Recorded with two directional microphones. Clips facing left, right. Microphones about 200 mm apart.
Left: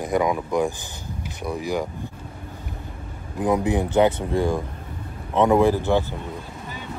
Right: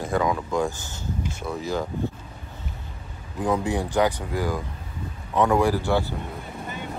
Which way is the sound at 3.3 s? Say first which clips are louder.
Left 3 dB; 20° left (ahead or behind).